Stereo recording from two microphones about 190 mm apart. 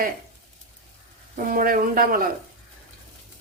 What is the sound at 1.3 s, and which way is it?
Speech, 45° right (ahead or behind).